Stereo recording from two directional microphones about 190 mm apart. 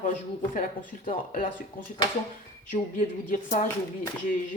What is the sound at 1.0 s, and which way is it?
Speech, 45° left (ahead or behind).